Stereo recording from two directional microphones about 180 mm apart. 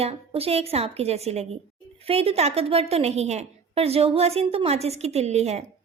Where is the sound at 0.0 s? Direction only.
35° right (ahead or behind).